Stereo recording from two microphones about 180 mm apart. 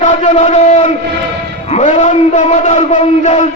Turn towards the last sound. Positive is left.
turn(degrees=40)  # may be behind; listen again after turning